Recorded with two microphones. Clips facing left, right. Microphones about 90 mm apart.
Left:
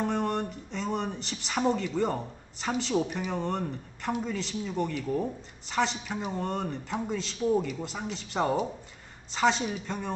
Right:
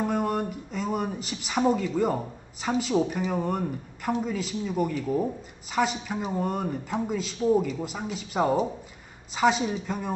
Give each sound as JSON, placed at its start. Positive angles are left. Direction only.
{"t": 0.0, "sound": "speech", "side_deg": -5}